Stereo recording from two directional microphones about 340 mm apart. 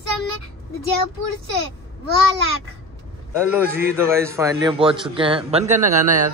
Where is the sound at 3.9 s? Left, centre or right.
Centre.